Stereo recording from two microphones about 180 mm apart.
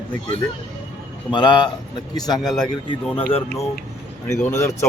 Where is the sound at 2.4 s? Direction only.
Centre (ahead or behind).